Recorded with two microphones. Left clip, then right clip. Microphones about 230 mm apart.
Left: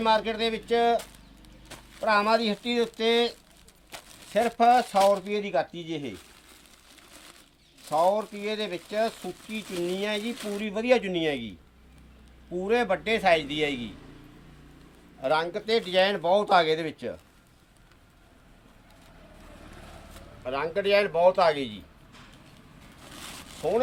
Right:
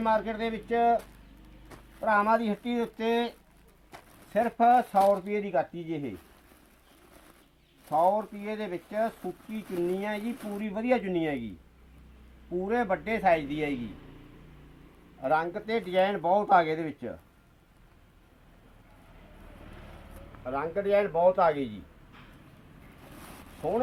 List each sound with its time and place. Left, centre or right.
0.0 s speech: left
0.5 s speech: centre
2.0 s speech: centre
4.3 s speech: left
5.2 s speech: centre
7.9 s speech: centre
12.5 s speech: centre
15.2 s speech: centre
20.4 s speech: left
20.8 s speech: centre
23.6 s speech: centre